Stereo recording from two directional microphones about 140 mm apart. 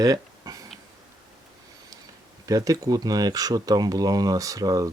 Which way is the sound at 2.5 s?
25° right (ahead or behind).